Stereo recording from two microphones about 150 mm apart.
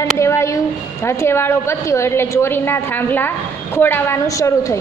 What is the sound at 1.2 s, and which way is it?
A woman's voice, 15° left (ahead or behind).